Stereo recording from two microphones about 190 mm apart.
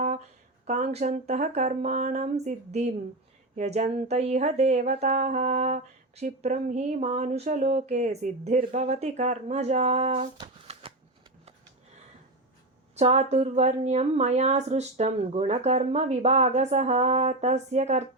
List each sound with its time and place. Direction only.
0.6 s music: 35° right (ahead or behind)
13.0 s music: 35° right (ahead or behind)